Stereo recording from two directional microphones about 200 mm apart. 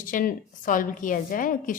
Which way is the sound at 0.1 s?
40° left (ahead or behind).